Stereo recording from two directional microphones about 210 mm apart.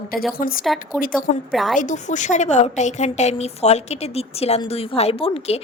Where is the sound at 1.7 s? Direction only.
35° left (ahead or behind).